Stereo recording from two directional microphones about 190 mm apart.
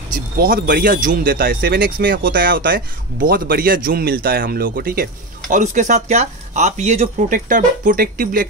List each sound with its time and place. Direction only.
0.4 s speech: 50° right (ahead or behind)